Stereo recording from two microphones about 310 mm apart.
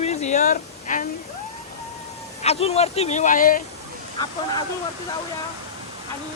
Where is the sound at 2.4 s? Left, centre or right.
Centre.